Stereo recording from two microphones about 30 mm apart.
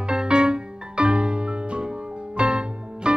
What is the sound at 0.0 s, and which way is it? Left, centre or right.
Music, right.